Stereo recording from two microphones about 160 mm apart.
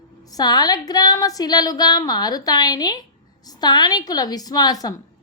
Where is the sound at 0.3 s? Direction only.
25° left (ahead or behind).